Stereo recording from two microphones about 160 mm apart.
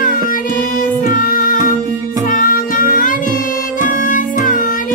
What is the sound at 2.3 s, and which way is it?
Child singing, 55° left (ahead or behind).